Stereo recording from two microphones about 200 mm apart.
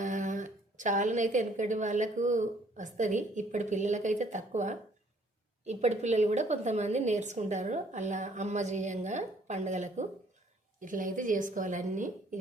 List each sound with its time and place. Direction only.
0.0 s a woman's voice: 40° right (ahead or behind)